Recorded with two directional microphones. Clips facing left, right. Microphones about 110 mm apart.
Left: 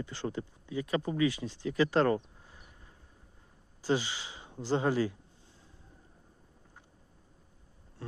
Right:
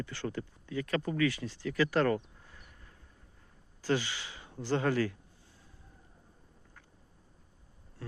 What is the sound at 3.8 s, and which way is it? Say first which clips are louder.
Speech: left 1 dB; 20° left (ahead or behind).